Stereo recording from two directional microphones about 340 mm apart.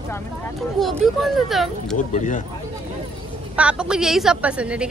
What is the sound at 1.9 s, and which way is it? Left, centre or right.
Speech, left.